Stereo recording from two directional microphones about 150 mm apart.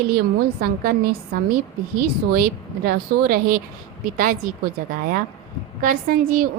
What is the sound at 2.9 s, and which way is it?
Speech, 80° right.